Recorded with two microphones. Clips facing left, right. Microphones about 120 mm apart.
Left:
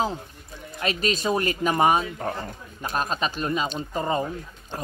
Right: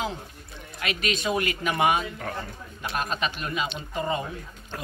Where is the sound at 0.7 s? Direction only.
35° left (ahead or behind).